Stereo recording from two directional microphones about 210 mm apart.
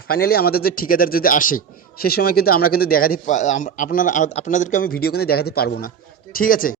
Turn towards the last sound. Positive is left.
turn(degrees=40)  # may be behind; listen again after turning